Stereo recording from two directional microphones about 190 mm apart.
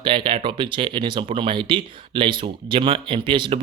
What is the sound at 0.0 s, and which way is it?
Speech, 25° right (ahead or behind).